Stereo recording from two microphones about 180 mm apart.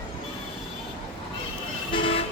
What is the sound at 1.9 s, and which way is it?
Toot, 30° left (ahead or behind).